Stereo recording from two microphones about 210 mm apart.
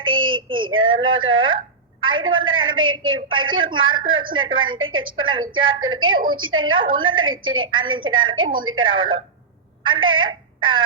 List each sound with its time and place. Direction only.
0.0 s child singing: 75° right (ahead or behind)
0.3 s child singing: 25° right (ahead or behind)
0.7 s a woman's voice: 70° right (ahead or behind)